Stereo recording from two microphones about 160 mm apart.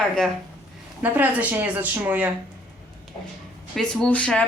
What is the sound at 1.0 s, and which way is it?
Speech, 10° right (ahead or behind).